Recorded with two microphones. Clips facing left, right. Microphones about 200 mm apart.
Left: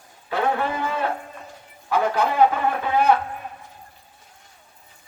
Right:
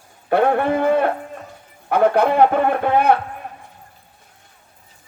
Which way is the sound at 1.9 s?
60° right (ahead or behind).